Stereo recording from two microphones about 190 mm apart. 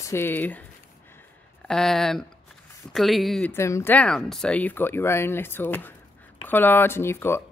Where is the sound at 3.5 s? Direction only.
15° left (ahead or behind).